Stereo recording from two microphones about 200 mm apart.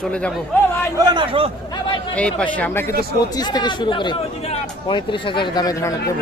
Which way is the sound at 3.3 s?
20° left (ahead or behind).